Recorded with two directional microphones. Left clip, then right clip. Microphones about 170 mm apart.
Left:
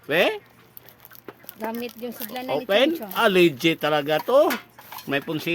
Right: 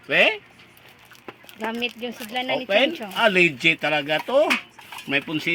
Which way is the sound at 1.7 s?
5° right (ahead or behind).